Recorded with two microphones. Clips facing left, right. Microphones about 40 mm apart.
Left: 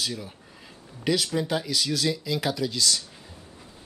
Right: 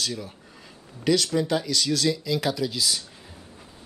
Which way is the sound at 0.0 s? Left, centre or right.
Centre.